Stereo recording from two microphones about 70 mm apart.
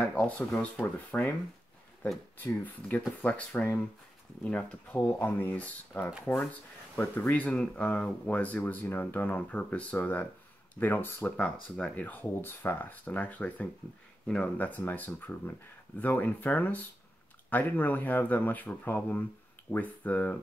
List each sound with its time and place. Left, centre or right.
0.0 s a sound: centre
0.6 s speech: left
2.3 s speech: left
5.0 s speech: left
5.5 s speech: left